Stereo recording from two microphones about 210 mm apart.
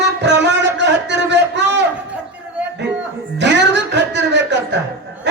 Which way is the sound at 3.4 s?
55° right (ahead or behind).